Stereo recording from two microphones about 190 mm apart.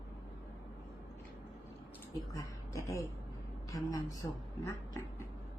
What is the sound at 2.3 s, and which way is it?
A woman's voice, 15° left (ahead or behind).